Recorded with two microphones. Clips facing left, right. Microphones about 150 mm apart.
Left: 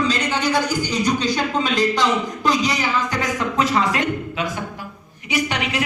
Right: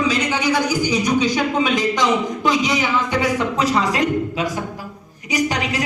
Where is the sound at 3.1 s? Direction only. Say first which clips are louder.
Right 3 dB; 30° right (ahead or behind).